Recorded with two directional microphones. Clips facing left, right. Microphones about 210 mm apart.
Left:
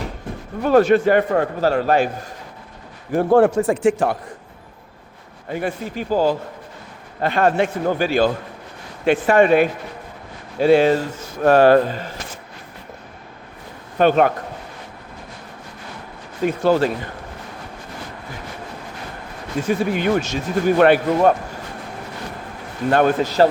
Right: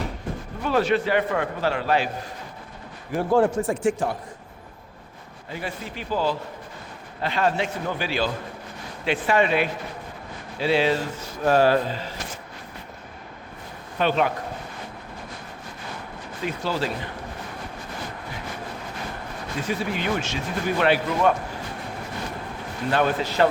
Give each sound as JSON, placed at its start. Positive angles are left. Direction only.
{"t": 0.6, "sound": "speech", "side_deg": 50}
{"t": 3.2, "sound": "a man's voice", "side_deg": 60}
{"t": 5.5, "sound": "speech", "side_deg": 50}
{"t": 11.4, "sound": "speech", "side_deg": 60}
{"t": 14.0, "sound": "speech", "side_deg": 50}
{"t": 16.4, "sound": "speech", "side_deg": 50}
{"t": 19.6, "sound": "speech", "side_deg": 45}
{"t": 22.9, "sound": "speech", "side_deg": 50}